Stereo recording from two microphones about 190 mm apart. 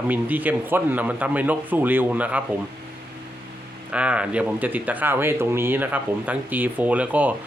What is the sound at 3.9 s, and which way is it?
Speech, 5° right (ahead or behind).